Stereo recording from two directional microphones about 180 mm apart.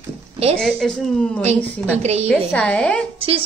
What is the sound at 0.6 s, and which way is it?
Speech, 5° left (ahead or behind).